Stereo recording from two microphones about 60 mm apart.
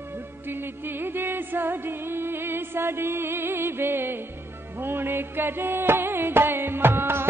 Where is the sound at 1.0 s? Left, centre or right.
Right.